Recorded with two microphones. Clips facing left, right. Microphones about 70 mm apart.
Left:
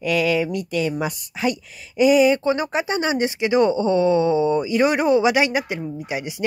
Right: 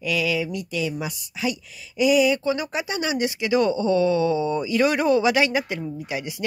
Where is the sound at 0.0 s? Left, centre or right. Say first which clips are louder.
Left 4 dB; left.